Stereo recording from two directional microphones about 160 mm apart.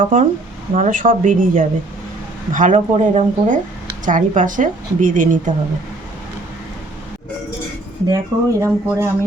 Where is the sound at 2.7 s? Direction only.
40° right (ahead or behind).